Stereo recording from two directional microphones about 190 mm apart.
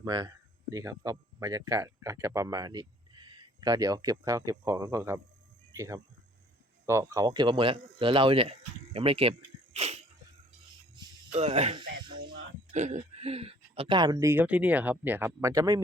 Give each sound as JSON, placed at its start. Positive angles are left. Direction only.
{"t": 0.0, "sound": "speech", "side_deg": -20}
{"t": 9.7, "sound": "sneeze", "side_deg": -35}
{"t": 11.3, "sound": "speech", "side_deg": -30}
{"t": 12.7, "sound": "speech", "side_deg": -40}